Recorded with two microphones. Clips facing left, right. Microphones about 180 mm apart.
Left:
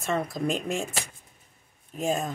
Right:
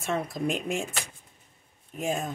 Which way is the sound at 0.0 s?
5° right (ahead or behind).